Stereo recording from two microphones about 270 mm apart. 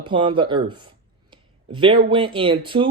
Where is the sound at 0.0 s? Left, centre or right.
Centre.